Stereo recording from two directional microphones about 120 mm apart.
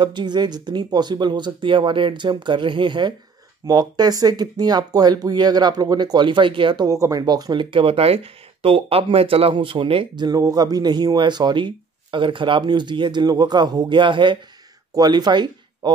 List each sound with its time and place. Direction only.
0.0 s speech: 40° right (ahead or behind)
6.9 s speech: 25° right (ahead or behind)